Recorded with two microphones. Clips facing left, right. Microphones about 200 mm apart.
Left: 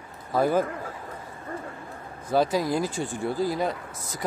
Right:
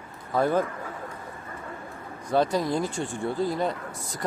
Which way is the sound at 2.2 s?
5° left (ahead or behind).